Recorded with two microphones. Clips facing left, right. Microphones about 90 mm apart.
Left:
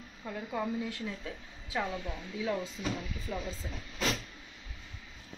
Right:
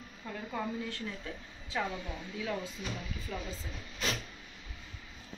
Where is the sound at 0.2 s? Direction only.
10° left (ahead or behind).